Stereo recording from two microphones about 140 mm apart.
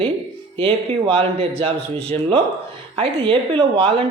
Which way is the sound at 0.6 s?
40° right (ahead or behind).